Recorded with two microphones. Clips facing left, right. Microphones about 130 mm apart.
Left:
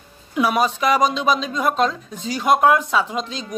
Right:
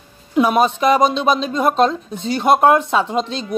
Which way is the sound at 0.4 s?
25° right (ahead or behind).